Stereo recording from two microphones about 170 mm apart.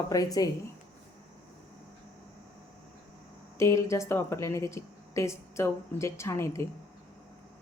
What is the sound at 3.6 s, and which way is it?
A woman's voice, 15° left (ahead or behind).